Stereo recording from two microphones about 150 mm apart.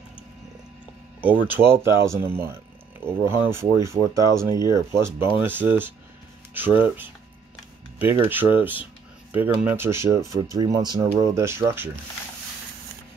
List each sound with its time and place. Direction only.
1.2 s speech: 10° right (ahead or behind)
8.3 s speech: 15° right (ahead or behind)